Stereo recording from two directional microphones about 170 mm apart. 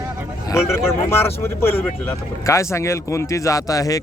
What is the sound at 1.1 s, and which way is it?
Speech, 15° left (ahead or behind).